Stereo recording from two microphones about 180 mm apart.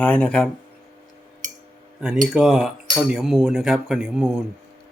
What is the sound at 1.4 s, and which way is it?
Cutlery, 45° right (ahead or behind).